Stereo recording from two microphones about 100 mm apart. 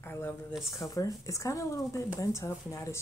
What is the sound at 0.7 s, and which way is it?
Speech, 35° left (ahead or behind).